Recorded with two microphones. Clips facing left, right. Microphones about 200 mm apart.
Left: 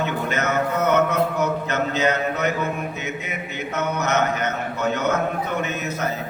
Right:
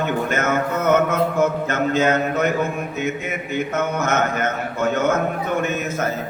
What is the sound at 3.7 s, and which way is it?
Mantra, 50° right (ahead or behind).